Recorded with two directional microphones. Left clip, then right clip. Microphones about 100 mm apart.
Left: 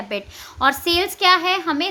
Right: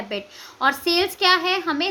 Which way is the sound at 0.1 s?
35° left (ahead or behind).